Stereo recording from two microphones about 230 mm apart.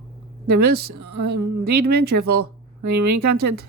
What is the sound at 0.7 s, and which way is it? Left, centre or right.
Speech, right.